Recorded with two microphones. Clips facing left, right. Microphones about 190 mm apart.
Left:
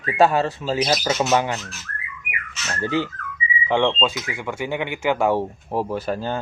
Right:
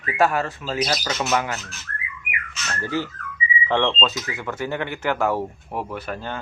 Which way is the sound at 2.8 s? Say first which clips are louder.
Left 3 dB; 20° left (ahead or behind).